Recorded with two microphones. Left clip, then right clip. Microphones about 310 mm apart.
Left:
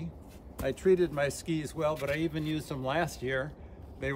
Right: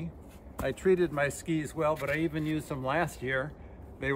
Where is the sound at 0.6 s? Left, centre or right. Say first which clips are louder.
Even; centre.